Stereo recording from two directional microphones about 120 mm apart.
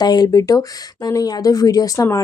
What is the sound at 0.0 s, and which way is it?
Speech, 35° left (ahead or behind).